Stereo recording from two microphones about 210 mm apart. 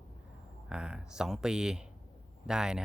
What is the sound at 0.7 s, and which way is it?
Speech, 5° right (ahead or behind).